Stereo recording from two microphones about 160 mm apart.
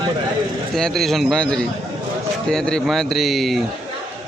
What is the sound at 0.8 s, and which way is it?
Speech, centre (ahead or behind).